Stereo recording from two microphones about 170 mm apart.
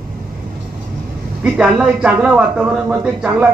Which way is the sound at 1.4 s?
5° right (ahead or behind).